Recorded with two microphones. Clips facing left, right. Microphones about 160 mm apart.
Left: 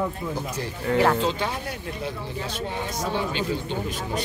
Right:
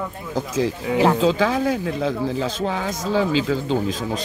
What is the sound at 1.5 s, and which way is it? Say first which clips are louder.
Speech: right 11 dB; 90° right.